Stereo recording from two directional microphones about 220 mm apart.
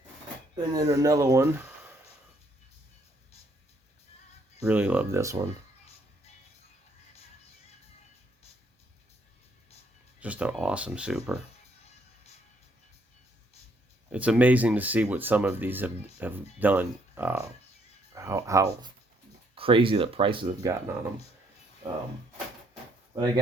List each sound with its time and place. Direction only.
0.5 s speech: 15° right (ahead or behind)
4.6 s speech: 5° right (ahead or behind)
10.2 s speech: 5° right (ahead or behind)
14.1 s speech: 5° right (ahead or behind)